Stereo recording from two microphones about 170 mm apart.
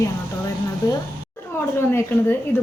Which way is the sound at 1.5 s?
10° left (ahead or behind).